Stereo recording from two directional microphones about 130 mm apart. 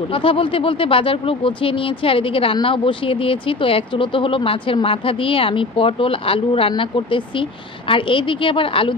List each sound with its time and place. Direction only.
0.1 s a woman's voice: 45° left (ahead or behind)